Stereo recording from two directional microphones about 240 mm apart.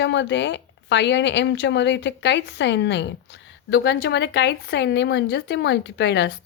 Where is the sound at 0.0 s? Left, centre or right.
Left.